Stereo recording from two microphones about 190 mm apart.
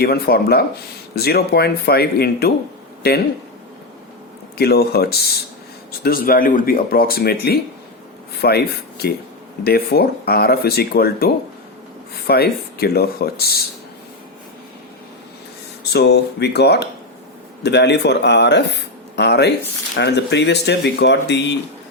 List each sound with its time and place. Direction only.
0.0 s speech: 55° left (ahead or behind)
4.5 s speech: 55° left (ahead or behind)
12.3 s speech: 55° left (ahead or behind)
15.9 s speech: 60° left (ahead or behind)